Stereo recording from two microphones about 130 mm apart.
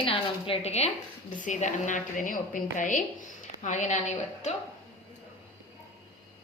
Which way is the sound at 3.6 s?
65° left (ahead or behind).